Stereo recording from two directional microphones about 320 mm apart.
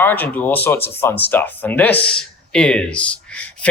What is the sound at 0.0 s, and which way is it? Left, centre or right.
Speech, centre.